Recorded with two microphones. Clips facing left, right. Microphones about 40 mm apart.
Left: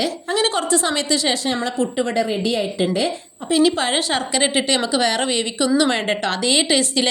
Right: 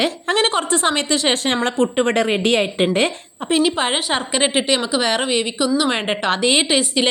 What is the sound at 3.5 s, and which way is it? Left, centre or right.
A woman's voice, right.